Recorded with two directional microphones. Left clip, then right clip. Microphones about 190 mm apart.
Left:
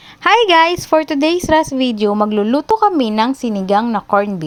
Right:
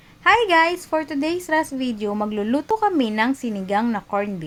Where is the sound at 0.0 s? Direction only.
50° left (ahead or behind).